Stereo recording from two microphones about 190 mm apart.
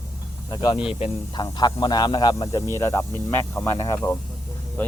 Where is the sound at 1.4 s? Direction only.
20° left (ahead or behind).